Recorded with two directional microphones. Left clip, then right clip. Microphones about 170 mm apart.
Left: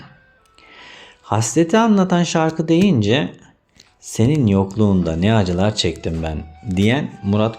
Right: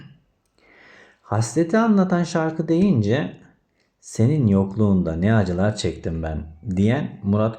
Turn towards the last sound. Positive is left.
turn(degrees=20)  # may be behind; listen again after turning